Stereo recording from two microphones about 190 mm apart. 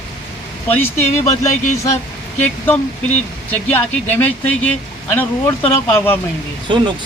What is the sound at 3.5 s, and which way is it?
Speech, 10° left (ahead or behind).